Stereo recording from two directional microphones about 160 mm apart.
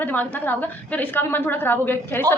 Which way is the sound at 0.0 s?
10° left (ahead or behind).